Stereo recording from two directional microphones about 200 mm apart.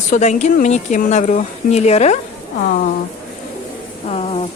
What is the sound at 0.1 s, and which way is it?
A woman's voice, 35° left (ahead or behind).